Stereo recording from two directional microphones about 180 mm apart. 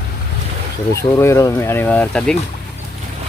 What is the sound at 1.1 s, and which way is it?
Speech, 15° left (ahead or behind).